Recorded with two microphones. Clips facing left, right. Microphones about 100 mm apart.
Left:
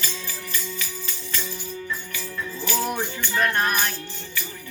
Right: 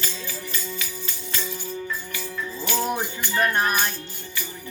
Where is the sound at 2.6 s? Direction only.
30° right (ahead or behind).